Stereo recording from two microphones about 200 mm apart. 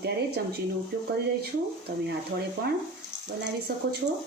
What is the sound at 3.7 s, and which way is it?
Speech, 50° right (ahead or behind).